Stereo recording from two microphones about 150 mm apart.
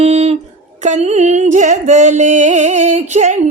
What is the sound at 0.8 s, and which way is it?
Music, 50° right (ahead or behind).